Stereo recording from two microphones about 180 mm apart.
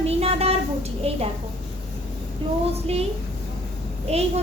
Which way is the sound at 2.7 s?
35° right (ahead or behind).